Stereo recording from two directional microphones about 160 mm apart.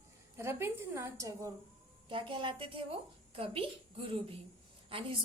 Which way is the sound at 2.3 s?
30° right (ahead or behind).